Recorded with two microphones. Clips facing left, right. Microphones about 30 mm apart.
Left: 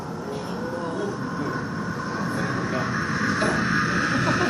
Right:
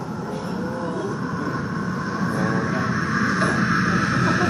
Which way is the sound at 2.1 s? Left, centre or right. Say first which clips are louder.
Right 4 dB; centre.